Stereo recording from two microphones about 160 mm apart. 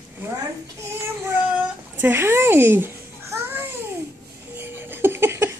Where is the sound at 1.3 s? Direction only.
10° right (ahead or behind).